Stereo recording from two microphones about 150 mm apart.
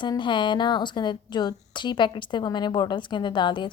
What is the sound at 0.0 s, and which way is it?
A woman's voice, 30° left (ahead or behind).